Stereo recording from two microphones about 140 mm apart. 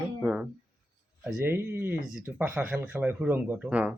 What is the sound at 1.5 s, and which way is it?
Speech, 15° right (ahead or behind).